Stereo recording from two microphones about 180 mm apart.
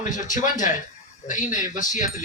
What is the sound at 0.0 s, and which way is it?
A man's voice, 45° left (ahead or behind).